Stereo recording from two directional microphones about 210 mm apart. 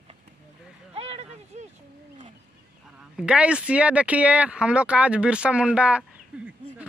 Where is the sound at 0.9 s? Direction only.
30° right (ahead or behind).